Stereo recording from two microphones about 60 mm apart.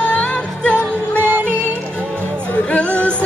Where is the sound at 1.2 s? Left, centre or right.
Right.